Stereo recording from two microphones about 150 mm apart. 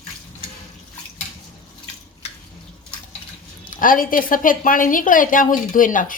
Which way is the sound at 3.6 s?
65° left (ahead or behind).